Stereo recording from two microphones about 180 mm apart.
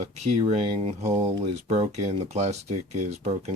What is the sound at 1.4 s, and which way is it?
Speech, 35° right (ahead or behind).